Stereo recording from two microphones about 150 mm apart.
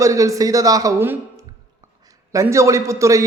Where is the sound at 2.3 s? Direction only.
20° right (ahead or behind).